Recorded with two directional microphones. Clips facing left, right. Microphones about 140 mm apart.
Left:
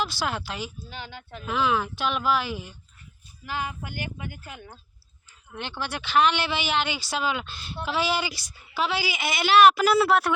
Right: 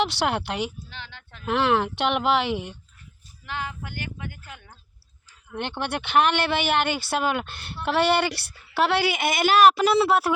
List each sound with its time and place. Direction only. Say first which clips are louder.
0.0 s speech: right 5 dB; 70° right (ahead or behind)
0.9 s speech: left 4 dB; 10° left (ahead or behind)
1.5 s speech: right 3 dB; 70° right (ahead or behind)
3.4 s speech: left 1 dB; 10° left (ahead or behind)
5.8 s speech: right 1 dB; 55° right (ahead or behind); by 9.8 s 40° right (ahead or behind)
9.8 s speech: right 1 dB; centre (ahead or behind)